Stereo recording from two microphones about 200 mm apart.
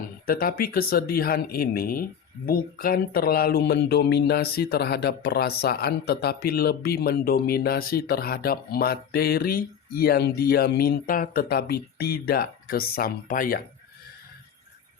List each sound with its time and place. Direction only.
0.3 s speech: 45° left (ahead or behind)